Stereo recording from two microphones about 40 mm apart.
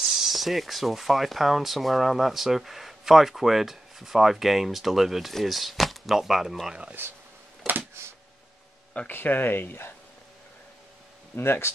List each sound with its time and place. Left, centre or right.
0.0 s speech: centre
7.0 s speech: right
8.0 s a sound: right
9.0 s speech: left
11.3 s speech: left